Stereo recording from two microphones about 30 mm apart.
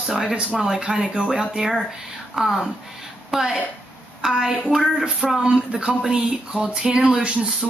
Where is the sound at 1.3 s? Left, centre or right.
Centre.